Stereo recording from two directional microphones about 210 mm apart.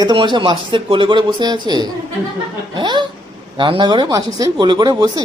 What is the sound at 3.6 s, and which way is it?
Speech, 25° right (ahead or behind).